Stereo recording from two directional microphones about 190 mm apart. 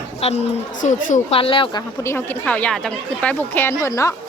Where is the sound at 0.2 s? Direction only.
35° left (ahead or behind).